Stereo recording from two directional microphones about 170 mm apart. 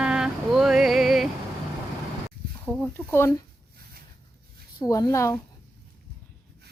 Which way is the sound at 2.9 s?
15° left (ahead or behind).